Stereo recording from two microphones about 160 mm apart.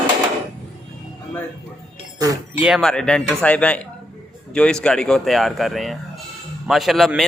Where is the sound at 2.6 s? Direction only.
Centre (ahead or behind).